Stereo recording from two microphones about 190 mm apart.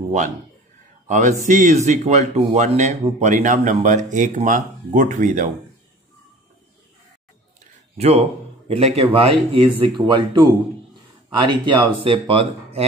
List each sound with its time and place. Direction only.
1.0 s speech: 40° right (ahead or behind)
8.0 s speech: 35° right (ahead or behind)